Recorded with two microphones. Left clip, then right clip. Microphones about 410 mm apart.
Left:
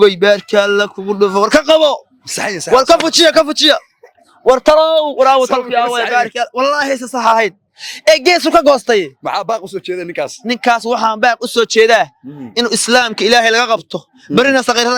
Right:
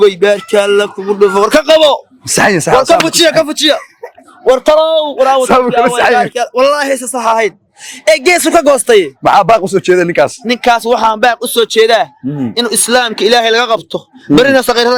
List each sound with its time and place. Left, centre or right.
0.0 s speech: left
2.2 s speech: right
2.7 s speech: left
4.4 s speech: left
6.1 s speech: left
9.2 s speech: right
10.1 s speech: right
10.4 s a man's voice: left